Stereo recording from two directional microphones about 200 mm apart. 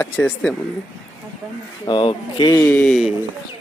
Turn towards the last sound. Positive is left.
turn(degrees=0)  # may be behind; listen again after turning